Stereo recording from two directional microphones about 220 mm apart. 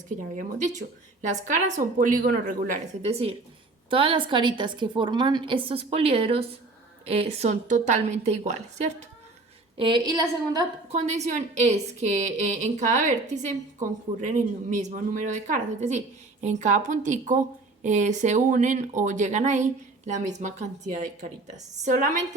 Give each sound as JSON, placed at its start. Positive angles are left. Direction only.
{"t": 0.3, "sound": "a woman's voice", "side_deg": -35}
{"t": 10.8, "sound": "speech", "side_deg": -30}